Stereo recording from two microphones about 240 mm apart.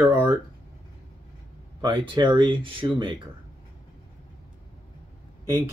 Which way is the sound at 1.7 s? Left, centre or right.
Centre.